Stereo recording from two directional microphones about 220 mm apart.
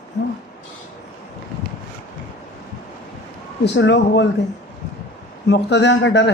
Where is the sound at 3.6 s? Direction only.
55° left (ahead or behind).